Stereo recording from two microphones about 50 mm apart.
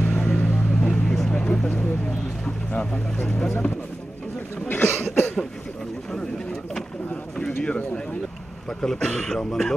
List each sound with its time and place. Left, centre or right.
0.0 s vehicle: left; by 1.3 s centre
1.3 s vehicle: left
4.6 s cough: left
7.6 s a sound: left
8.6 s speech: centre